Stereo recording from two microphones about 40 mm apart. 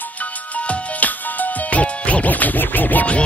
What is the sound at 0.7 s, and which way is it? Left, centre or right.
Music, left.